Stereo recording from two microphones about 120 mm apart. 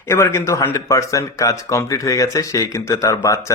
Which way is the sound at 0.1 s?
20° left (ahead or behind).